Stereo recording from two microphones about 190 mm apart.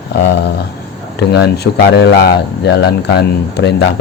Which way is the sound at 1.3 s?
60° left (ahead or behind).